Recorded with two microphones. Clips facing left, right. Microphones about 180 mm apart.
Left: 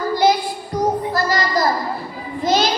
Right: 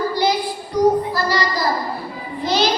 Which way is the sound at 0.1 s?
45° left (ahead or behind).